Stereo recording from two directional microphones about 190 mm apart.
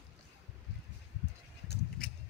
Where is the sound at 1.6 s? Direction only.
60° left (ahead or behind).